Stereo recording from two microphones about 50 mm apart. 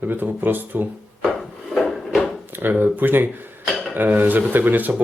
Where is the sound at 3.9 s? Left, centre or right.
Right.